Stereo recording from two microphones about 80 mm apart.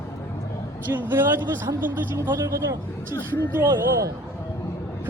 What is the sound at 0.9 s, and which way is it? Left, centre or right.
A man's voice, right.